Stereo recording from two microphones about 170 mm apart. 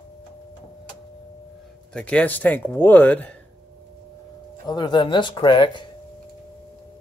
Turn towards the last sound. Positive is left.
turn(degrees=30)  # may be behind; listen again after turning